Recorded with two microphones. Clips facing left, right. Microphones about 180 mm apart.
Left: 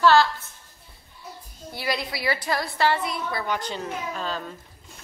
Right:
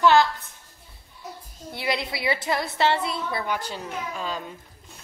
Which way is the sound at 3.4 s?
10° right (ahead or behind).